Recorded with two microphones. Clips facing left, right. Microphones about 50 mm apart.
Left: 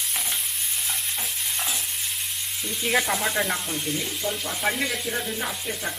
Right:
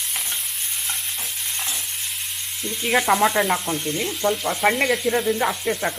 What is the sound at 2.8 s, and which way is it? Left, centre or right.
Sizzle, centre.